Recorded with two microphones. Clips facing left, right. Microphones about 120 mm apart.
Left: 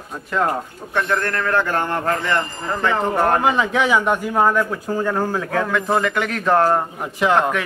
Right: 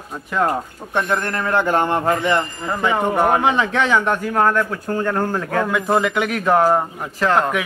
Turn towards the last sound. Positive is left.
turn(degrees=-5)  # may be behind; listen again after turning